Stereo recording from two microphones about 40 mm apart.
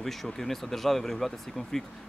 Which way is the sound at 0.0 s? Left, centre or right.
Centre.